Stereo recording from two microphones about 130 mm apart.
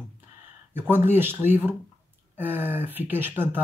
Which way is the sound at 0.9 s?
15° right (ahead or behind).